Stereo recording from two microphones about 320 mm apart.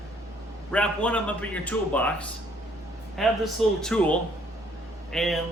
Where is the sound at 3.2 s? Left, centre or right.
Centre.